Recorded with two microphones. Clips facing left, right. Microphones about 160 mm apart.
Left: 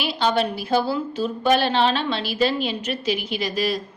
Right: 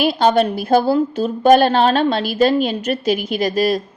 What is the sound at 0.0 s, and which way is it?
A woman's voice, 50° right (ahead or behind).